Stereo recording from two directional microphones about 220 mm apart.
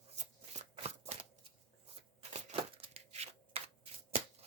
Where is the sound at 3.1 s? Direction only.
30° right (ahead or behind).